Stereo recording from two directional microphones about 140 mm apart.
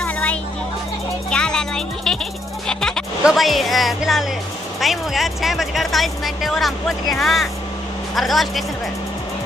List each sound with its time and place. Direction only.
0.0 s music: 10° left (ahead or behind)
2.7 s speech: 5° left (ahead or behind)